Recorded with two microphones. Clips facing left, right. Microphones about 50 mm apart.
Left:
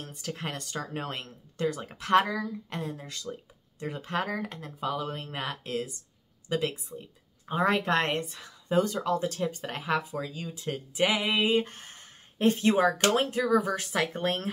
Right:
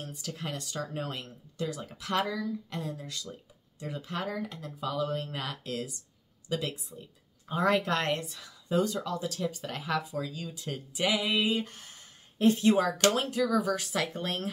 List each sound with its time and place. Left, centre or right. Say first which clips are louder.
0.0 s speech: left 2 dB; left